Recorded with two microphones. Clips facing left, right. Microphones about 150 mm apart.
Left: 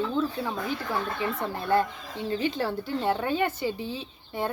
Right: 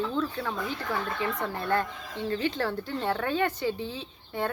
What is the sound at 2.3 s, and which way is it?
A woman's voice, 10° left (ahead or behind).